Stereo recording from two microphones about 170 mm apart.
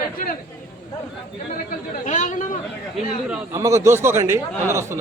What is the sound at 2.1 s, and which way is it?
Speech, 45° left (ahead or behind).